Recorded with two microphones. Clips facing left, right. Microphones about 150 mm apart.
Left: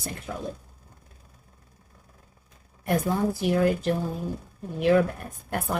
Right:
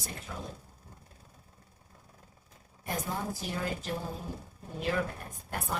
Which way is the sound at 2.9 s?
65° left (ahead or behind).